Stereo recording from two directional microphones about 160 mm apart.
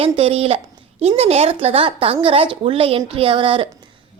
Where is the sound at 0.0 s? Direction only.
35° right (ahead or behind).